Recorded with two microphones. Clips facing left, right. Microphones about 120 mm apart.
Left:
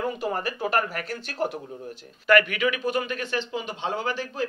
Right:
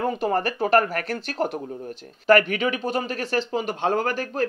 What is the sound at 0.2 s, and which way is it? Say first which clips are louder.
Speech: right 5 dB; 60° right (ahead or behind).